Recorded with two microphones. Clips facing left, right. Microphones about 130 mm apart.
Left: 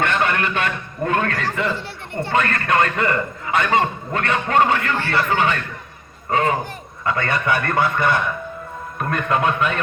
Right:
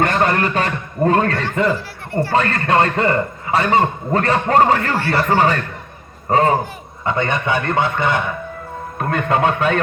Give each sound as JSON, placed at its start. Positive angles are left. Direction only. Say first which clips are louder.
{"t": 0.0, "sound": "a man's voice", "louder": "right 4 dB", "side_deg": -40}
{"t": 7.0, "sound": "a man's voice", "louder": "right 2 dB", "side_deg": -25}